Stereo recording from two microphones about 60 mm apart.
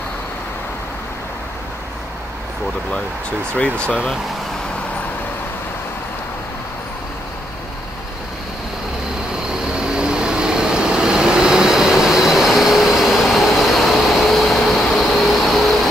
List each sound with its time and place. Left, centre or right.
3.5 s speech: centre
9.8 s vehicle: centre